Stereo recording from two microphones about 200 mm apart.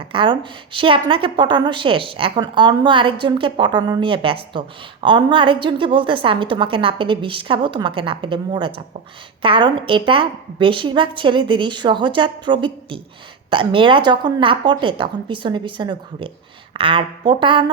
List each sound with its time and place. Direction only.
0.0 s a woman's voice: 25° right (ahead or behind)